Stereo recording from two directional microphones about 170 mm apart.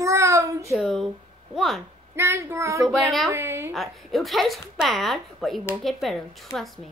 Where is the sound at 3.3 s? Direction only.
15° right (ahead or behind).